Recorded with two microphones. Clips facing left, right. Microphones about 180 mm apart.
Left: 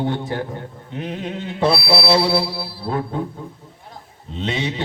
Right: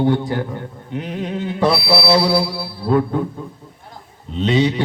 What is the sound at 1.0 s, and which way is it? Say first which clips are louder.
A man's voice: right 2 dB; 25° left (ahead or behind).